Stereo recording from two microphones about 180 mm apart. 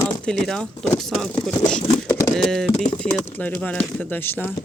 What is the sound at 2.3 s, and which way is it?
Speech, 5° left (ahead or behind).